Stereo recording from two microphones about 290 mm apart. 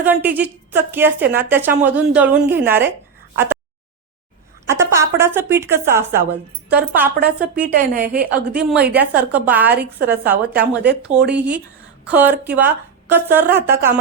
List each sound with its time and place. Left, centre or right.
0.0 s a woman's voice: centre
3.3 s a sound: centre
4.7 s a woman's voice: centre
7.6 s a woman's voice: right
8.2 s a woman's voice: centre